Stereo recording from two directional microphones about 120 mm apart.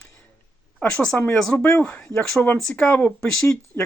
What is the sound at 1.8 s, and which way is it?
Speech, 10° left (ahead or behind).